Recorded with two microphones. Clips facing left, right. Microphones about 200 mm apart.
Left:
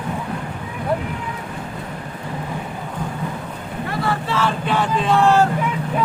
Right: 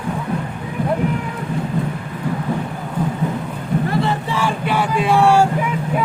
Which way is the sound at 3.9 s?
20° right (ahead or behind).